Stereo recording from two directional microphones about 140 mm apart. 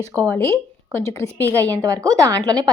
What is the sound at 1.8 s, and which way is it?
Speech, 25° right (ahead or behind).